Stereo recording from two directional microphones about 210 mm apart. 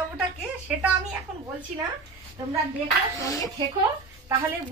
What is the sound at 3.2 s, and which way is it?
Speech, 15° left (ahead or behind).